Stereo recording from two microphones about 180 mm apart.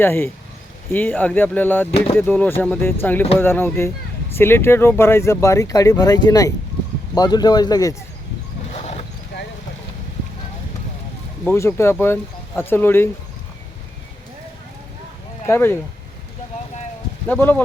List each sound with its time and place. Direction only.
0.0 s speech: 10° left (ahead or behind)
8.7 s vehicle: 35° left (ahead or behind)
11.4 s speech: 15° left (ahead or behind)
15.4 s speech: 15° left (ahead or behind)
17.2 s speech: 10° left (ahead or behind)